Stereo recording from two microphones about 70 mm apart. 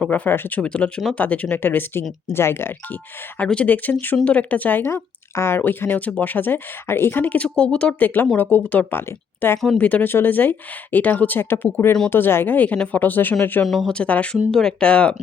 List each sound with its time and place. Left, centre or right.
0.1 s speech: left
0.6 s speech: centre
1.5 s speech: left
3.3 s speech: centre
4.9 s speech: left
9.7 s speech: left
13.7 s speech: centre
13.9 s speech: centre